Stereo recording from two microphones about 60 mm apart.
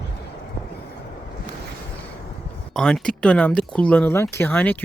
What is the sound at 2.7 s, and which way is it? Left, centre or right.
Speech, centre.